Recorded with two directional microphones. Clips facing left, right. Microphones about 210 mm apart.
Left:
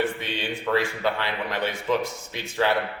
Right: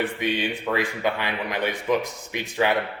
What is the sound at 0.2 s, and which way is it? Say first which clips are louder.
Speech: right 5 dB; 15° right (ahead or behind).